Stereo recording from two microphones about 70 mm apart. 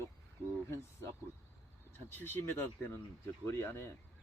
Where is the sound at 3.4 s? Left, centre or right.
Left.